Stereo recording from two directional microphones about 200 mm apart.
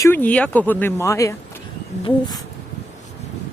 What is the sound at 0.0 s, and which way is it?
Speech, 10° left (ahead or behind).